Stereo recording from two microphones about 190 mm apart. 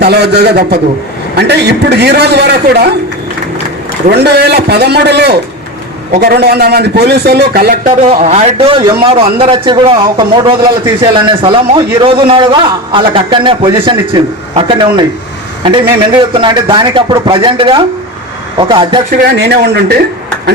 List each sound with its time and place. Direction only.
0.0 s a man's voice: 60° right (ahead or behind)
4.1 s a man's voice: 60° right (ahead or behind)
8.0 s a man's voice: 35° right (ahead or behind)
16.3 s a man's voice: 25° right (ahead or behind)
19.1 s a man's voice: 55° right (ahead or behind)